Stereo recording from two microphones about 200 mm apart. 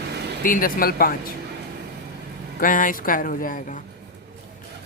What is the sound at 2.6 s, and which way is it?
Speech, 40° left (ahead or behind).